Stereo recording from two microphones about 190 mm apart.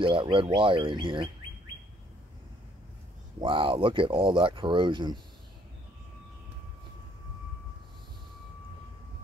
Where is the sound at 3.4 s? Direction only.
25° right (ahead or behind).